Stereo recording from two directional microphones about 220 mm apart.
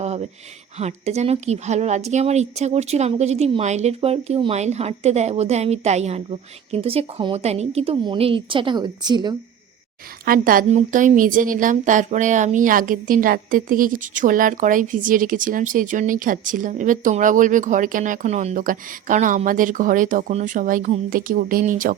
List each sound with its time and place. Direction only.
0.0 s a sound: 30° right (ahead or behind)
0.8 s speech: 30° right (ahead or behind)
10.2 s a woman's voice: 40° right (ahead or behind)